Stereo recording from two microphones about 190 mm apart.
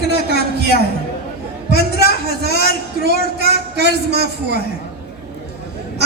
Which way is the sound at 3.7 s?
60° right (ahead or behind).